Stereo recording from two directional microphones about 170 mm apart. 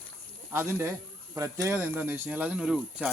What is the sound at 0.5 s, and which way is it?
Speech, 15° right (ahead or behind).